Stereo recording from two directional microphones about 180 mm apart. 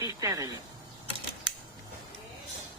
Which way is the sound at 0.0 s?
20° right (ahead or behind).